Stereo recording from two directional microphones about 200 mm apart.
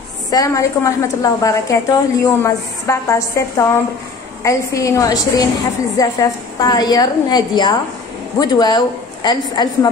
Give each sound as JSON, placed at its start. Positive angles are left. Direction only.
{"t": 0.3, "sound": "a woman's voice", "side_deg": 15}